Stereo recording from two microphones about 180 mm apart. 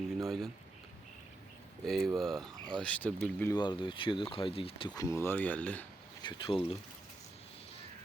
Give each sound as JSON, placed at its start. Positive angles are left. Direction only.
{"t": 0.2, "sound": "speech", "side_deg": 0}
{"t": 1.9, "sound": "speech", "side_deg": 0}
{"t": 3.5, "sound": "speech", "side_deg": 25}
{"t": 4.9, "sound": "speech", "side_deg": 15}
{"t": 6.2, "sound": "speech", "side_deg": 30}